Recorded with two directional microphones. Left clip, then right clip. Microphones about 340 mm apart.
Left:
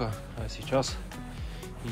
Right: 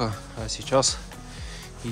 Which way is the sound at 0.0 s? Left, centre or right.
Centre.